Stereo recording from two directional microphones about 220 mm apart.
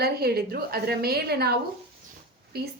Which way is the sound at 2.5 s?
50° right (ahead or behind).